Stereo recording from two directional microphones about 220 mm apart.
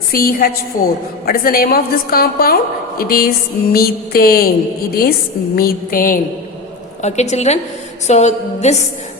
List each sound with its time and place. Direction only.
0.1 s a woman's voice: 40° left (ahead or behind)
5.5 s a woman's voice: 40° left (ahead or behind)